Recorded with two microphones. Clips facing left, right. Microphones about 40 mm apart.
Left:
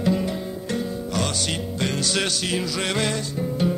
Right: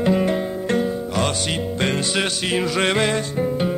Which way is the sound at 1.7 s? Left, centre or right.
Right.